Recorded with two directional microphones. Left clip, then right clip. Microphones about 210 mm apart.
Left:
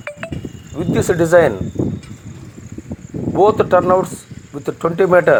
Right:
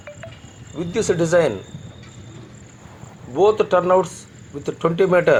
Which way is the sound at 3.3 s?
35° left (ahead or behind).